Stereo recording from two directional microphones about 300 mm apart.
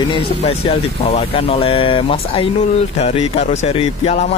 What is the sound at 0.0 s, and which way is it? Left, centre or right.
Speech, centre.